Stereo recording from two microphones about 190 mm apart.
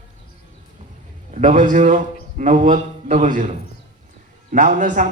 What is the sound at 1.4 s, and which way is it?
A man's voice, 45° right (ahead or behind).